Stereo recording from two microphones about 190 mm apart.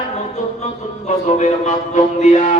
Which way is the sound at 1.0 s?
40° left (ahead or behind).